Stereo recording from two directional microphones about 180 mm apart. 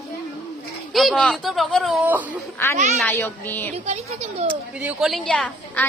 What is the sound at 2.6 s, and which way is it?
Music, 15° left (ahead or behind).